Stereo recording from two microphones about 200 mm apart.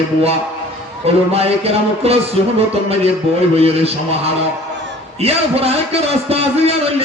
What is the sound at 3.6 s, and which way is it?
Speech, 30° right (ahead or behind).